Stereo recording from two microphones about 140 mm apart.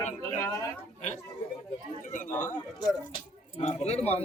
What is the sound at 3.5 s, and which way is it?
Speech, 50° left (ahead or behind).